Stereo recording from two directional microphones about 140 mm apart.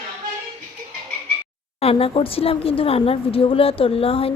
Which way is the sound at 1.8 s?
45° left (ahead or behind).